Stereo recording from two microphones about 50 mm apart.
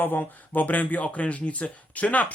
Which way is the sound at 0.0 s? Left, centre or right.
Left.